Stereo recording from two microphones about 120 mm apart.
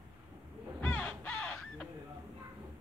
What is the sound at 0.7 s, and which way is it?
Crow, 10° left (ahead or behind).